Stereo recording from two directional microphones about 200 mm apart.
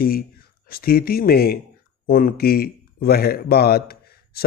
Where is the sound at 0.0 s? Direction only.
50° left (ahead or behind).